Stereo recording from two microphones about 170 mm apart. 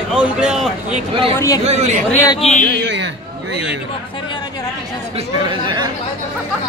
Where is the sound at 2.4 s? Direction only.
40° left (ahead or behind).